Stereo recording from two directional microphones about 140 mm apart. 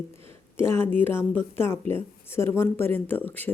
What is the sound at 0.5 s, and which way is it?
Speech, 15° left (ahead or behind).